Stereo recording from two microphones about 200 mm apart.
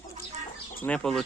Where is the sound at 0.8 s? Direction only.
5° left (ahead or behind).